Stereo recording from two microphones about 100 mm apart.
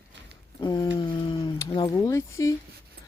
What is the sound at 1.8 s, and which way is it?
Speech, 35° left (ahead or behind).